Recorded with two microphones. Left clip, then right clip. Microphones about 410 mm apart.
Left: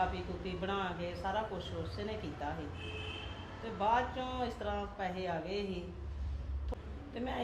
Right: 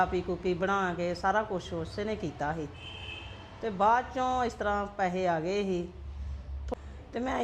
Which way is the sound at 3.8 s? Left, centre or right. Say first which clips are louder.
Right 7 dB; right.